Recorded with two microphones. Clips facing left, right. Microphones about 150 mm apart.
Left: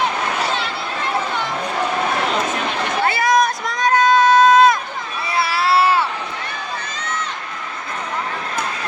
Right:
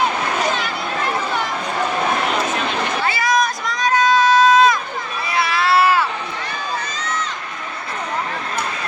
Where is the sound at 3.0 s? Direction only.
55° left (ahead or behind).